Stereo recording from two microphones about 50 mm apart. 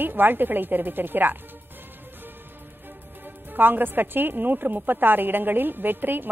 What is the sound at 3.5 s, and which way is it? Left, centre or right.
A woman's voice, right.